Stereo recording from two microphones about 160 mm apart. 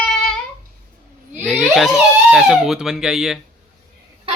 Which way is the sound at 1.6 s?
Centre (ahead or behind).